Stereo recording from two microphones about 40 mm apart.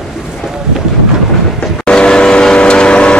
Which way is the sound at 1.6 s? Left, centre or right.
Left.